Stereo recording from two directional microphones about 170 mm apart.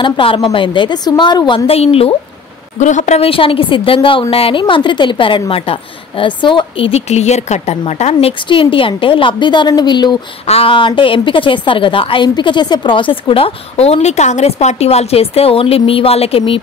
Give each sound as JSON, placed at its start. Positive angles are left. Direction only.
{"t": 0.0, "sound": "a woman's voice", "side_deg": 30}
{"t": 2.8, "sound": "a woman's voice", "side_deg": 45}